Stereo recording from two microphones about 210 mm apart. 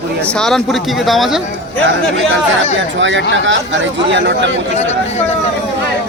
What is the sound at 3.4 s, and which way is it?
Speech, 65° right (ahead or behind).